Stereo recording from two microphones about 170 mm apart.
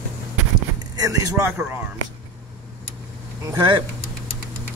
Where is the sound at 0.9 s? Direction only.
20° right (ahead or behind).